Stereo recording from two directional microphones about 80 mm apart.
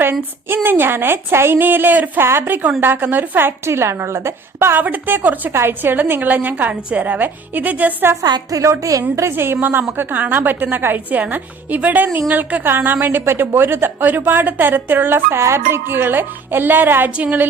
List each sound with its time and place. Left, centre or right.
0.0 s speech: right
5.5 s speech: right
8.1 s a woman's voice: right
9.1 s speech: right